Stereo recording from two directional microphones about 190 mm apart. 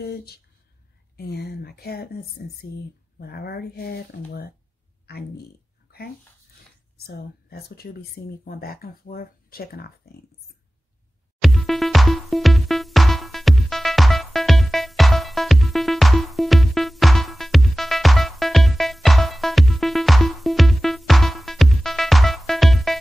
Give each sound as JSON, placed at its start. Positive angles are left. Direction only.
{"t": 0.0, "sound": "speech", "side_deg": 55}
{"t": 5.0, "sound": "a sound", "side_deg": 55}
{"t": 7.1, "sound": "speech", "side_deg": 55}
{"t": 11.4, "sound": "music", "side_deg": 0}